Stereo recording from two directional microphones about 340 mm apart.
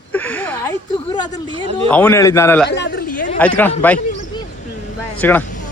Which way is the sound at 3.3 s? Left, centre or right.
Centre.